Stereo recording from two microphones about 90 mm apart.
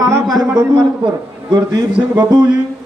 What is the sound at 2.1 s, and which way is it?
Speech, 50° right (ahead or behind).